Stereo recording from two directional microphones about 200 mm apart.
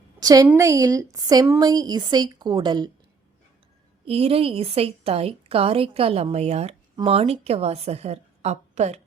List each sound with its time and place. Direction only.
0.2 s a woman's voice: 20° right (ahead or behind)
4.0 s a woman's voice: 30° right (ahead or behind)